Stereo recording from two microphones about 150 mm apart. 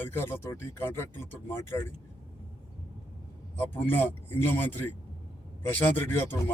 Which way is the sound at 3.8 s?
15° left (ahead or behind).